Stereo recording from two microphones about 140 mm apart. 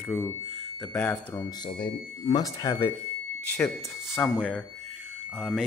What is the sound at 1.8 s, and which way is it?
Speech, 30° left (ahead or behind).